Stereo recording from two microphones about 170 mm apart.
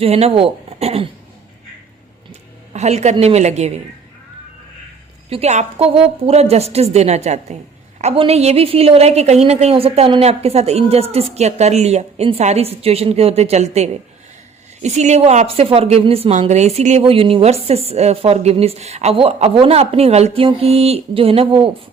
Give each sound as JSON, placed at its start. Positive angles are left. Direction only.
{"t": 0.0, "sound": "speech", "side_deg": -35}
{"t": 2.7, "sound": "a woman's voice", "side_deg": -40}
{"t": 5.3, "sound": "a woman's voice", "side_deg": -40}